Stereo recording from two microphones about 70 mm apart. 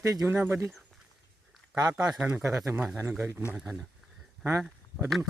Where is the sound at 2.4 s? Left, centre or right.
Right.